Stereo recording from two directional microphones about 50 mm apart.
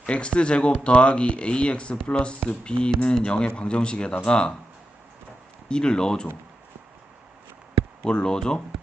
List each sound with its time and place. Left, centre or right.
0.0 s speech: left
5.6 s speech: centre
8.0 s speech: centre